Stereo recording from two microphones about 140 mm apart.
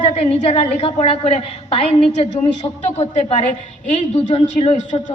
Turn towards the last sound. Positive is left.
turn(degrees=55)  # may be behind; listen again after turning